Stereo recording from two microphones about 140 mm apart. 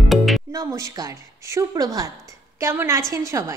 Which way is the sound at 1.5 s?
25° right (ahead or behind).